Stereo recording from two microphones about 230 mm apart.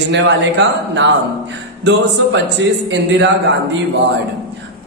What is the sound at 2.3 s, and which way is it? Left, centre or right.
Speech, right.